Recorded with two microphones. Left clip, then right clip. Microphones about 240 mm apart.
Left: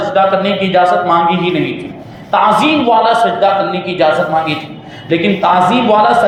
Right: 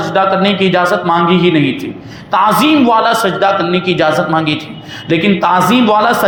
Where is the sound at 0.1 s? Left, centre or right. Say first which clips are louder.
Even; right.